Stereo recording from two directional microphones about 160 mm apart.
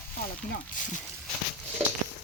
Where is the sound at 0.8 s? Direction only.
55° left (ahead or behind).